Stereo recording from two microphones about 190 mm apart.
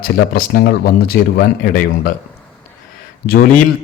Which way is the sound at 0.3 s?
50° left (ahead or behind).